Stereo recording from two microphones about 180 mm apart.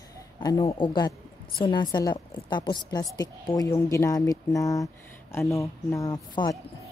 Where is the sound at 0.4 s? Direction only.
20° left (ahead or behind).